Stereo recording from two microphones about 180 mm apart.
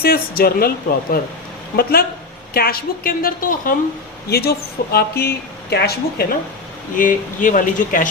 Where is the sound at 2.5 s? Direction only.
55° left (ahead or behind).